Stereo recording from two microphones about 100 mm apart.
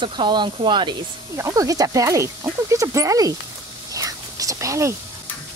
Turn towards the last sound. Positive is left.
turn(degrees=-30)  # may be behind; listen again after turning